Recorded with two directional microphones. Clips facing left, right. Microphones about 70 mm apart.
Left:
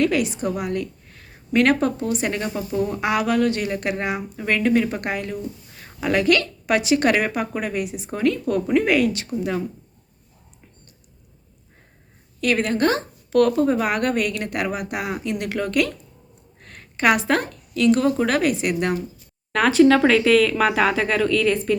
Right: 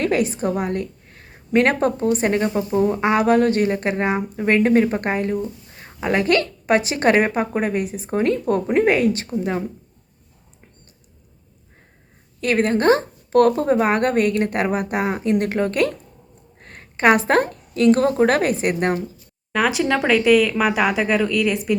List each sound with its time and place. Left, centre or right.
0.0 s a woman's voice: right
12.4 s a woman's voice: right
19.5 s speech: centre